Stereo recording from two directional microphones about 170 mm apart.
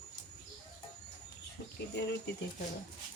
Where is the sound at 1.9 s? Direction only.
85° left.